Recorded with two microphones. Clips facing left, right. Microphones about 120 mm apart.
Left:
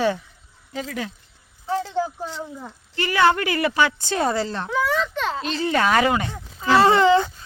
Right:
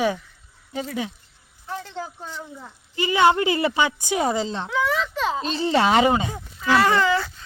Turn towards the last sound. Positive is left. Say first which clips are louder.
# left 4 dB
turn(degrees=20)  # may be behind; listen again after turning